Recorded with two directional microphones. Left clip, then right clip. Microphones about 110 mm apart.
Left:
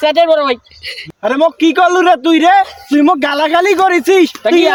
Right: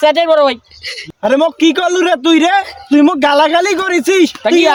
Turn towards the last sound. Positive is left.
turn(degrees=-45)  # may be behind; listen again after turning